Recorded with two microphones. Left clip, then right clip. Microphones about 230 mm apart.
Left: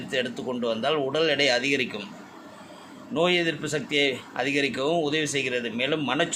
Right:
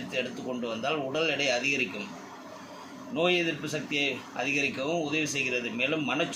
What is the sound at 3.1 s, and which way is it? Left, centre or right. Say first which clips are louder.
Speech: left 3 dB; left.